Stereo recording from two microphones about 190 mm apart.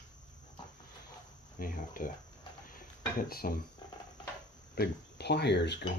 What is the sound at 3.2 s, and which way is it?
Speech, 50° left (ahead or behind).